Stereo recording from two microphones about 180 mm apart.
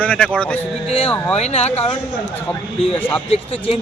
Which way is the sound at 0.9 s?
35° left (ahead or behind).